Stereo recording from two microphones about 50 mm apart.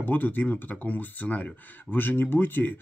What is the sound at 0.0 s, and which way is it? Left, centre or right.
Speech, left.